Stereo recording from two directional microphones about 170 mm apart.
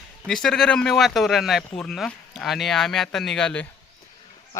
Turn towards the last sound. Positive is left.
turn(degrees=5)  # may be behind; listen again after turning